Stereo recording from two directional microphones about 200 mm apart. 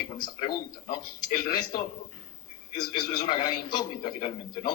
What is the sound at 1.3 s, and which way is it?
Speech, 45° left (ahead or behind).